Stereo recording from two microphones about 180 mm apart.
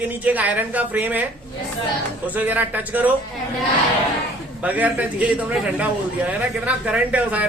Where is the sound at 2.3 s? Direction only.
10° right (ahead or behind).